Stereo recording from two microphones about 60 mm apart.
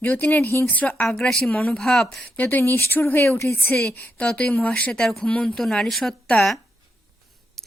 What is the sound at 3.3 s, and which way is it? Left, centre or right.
Speech, left.